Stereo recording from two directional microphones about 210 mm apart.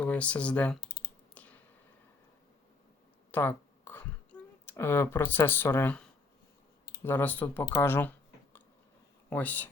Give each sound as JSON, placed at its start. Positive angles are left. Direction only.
{"t": 0.0, "sound": "speech", "side_deg": 5}
{"t": 0.8, "sound": "typing", "side_deg": 45}
{"t": 1.4, "sound": "a sound", "side_deg": 5}
{"t": 3.3, "sound": "a sound", "side_deg": 10}
{"t": 7.0, "sound": "speech", "side_deg": 10}
{"t": 9.3, "sound": "speech", "side_deg": 10}